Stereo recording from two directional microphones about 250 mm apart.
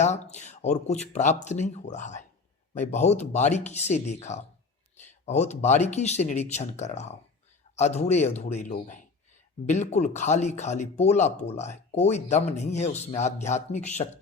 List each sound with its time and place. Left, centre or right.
0.0 s speech: left